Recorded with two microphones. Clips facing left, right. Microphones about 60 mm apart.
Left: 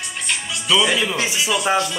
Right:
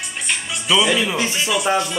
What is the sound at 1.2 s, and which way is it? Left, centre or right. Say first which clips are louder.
Speech: even; centre.